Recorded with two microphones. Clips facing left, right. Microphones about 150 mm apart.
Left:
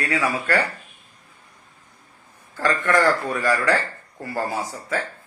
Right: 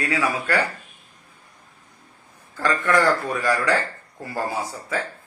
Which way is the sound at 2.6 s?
15° right (ahead or behind).